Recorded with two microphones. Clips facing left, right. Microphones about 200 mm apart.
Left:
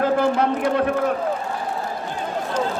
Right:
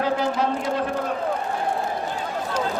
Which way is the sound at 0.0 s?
55° left (ahead or behind).